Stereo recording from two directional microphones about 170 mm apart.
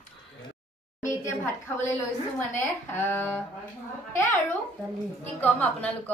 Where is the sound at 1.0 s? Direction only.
20° left (ahead or behind).